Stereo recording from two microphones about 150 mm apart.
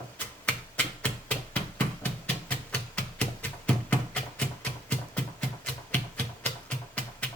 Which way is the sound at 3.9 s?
10° left (ahead or behind).